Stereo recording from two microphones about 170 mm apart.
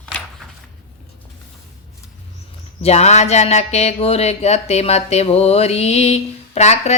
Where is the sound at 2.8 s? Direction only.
40° left (ahead or behind).